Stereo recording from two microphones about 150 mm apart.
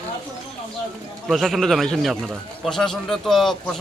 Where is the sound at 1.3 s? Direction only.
Centre (ahead or behind).